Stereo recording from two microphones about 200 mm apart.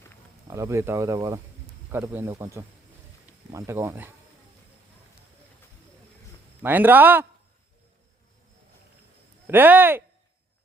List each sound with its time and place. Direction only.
0.4 s speech: 15° right (ahead or behind)
6.6 s speech: 10° right (ahead or behind)
9.5 s speech: 10° right (ahead or behind)